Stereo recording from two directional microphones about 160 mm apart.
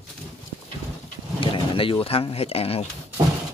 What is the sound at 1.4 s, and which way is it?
Speech, 35° left (ahead or behind).